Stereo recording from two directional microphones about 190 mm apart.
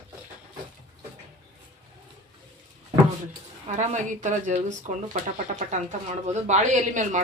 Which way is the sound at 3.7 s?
40° right (ahead or behind).